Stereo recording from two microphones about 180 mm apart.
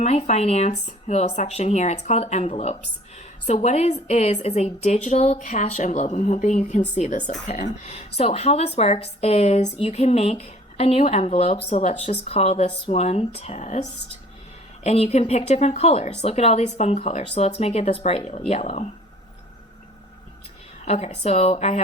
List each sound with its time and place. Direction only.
0.0 s speech: 40° left (ahead or behind)
14.8 s speech: 35° left (ahead or behind)
20.8 s speech: 35° left (ahead or behind)